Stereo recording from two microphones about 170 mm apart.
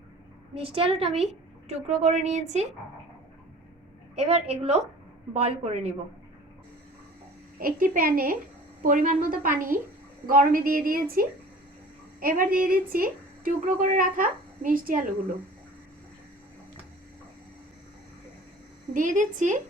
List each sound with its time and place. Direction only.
0.5 s a woman's voice: 35° right (ahead or behind)
4.1 s a woman's voice: 35° right (ahead or behind)
7.6 s a woman's voice: 60° right (ahead or behind)
18.9 s a woman's voice: 50° right (ahead or behind)